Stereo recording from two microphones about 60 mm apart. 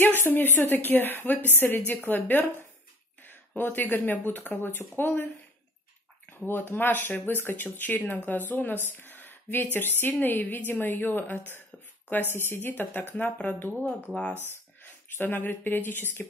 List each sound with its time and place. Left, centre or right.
0.0 s speech: left
6.3 s speech: left
14.8 s speech: left